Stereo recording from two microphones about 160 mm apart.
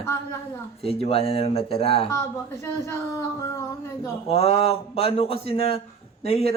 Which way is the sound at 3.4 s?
20° left (ahead or behind).